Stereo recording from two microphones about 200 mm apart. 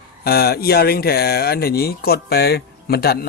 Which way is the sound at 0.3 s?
50° left (ahead or behind).